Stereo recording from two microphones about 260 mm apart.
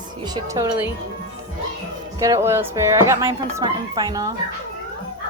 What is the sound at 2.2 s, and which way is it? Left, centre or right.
A woman's voice, centre.